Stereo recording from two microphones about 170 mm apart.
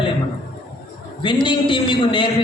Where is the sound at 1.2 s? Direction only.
30° left (ahead or behind).